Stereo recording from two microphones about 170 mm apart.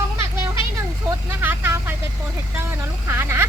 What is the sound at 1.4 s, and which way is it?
Speech, 10° right (ahead or behind).